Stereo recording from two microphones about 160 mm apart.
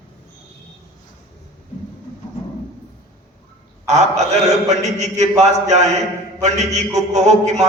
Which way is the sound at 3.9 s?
45° right (ahead or behind).